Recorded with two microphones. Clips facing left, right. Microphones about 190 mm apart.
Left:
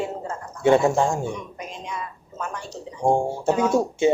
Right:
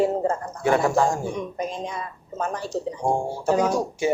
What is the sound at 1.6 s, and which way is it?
A woman's voice, 35° right (ahead or behind).